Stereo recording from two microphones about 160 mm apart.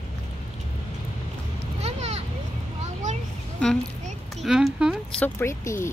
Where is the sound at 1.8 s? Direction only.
40° right (ahead or behind).